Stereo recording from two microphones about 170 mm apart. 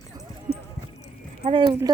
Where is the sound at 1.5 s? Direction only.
30° right (ahead or behind).